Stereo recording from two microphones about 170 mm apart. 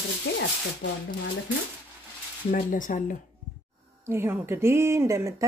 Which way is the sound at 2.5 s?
55° left (ahead or behind).